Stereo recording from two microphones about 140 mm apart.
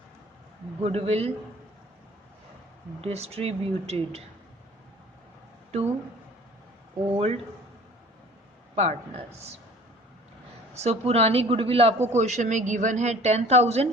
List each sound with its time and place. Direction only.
0.8 s a man's voice: 45° right (ahead or behind)
3.0 s a man's voice: 45° right (ahead or behind)
7.1 s a man's voice: 50° right (ahead or behind)
8.7 s a man's voice: 50° right (ahead or behind)
10.8 s a man's voice: 50° right (ahead or behind)